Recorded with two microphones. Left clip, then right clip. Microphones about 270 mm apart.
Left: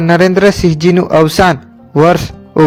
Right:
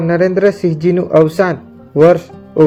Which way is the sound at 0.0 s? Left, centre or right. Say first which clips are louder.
Left 3 dB; left.